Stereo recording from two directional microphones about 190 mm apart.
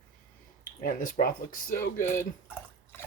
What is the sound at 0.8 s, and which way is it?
Speech, 50° left (ahead or behind).